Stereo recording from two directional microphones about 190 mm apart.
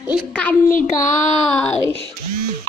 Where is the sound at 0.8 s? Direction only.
40° left (ahead or behind).